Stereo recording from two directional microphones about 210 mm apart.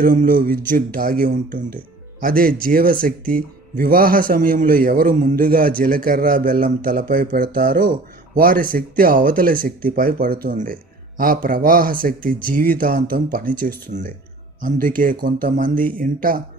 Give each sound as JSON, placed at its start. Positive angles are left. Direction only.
{"t": 0.0, "sound": "a man's voice", "side_deg": -45}